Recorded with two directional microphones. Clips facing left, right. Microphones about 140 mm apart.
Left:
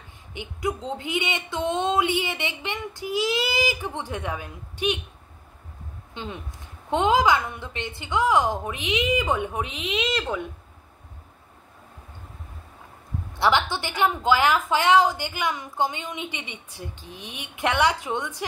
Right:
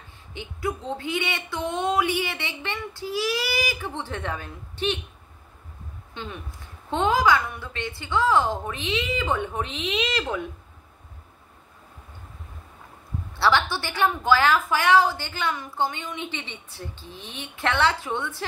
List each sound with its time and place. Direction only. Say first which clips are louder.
0.3 s a woman's voice: left 1 dB; 15° left (ahead or behind)
6.1 s a woman's voice: left 1 dB; 20° left (ahead or behind)
9.8 s speech: left 1 dB; centre (ahead or behind)
13.4 s a woman's voice: even; 15° left (ahead or behind)